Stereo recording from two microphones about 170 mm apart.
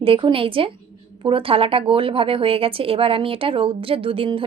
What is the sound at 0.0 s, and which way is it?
A woman's voice, 30° right (ahead or behind).